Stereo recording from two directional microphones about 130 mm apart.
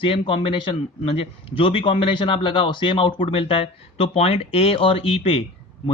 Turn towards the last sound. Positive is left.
turn(degrees=50)  # may be behind; listen again after turning